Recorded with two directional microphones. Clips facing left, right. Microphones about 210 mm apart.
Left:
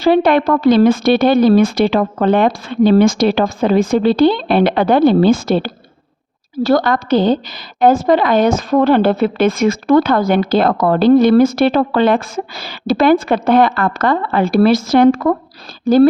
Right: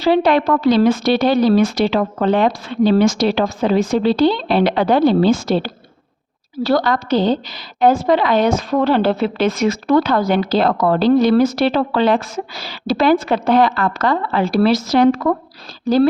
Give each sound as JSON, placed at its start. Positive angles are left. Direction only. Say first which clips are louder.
{"t": 0.0, "sound": "speech", "louder": "left 2 dB", "side_deg": 50}